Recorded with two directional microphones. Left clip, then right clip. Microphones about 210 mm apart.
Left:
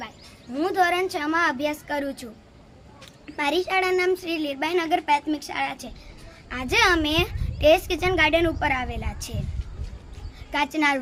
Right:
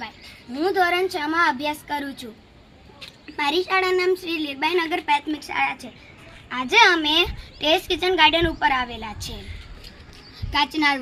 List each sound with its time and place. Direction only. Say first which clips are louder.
0.6 s a woman's voice: right 2 dB; 25° left (ahead or behind)
3.2 s a woman's voice: right 2 dB; 30° left (ahead or behind)
10.5 s a woman's voice: right 2 dB; 25° left (ahead or behind)